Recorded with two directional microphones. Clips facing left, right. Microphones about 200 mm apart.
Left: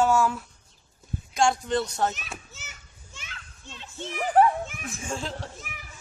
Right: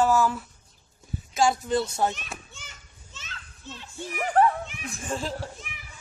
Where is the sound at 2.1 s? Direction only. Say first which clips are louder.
Right 1 dB; 5° left (ahead or behind).